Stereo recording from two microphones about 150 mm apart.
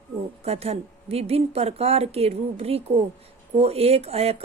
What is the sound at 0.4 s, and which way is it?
A woman's voice, 40° right (ahead or behind).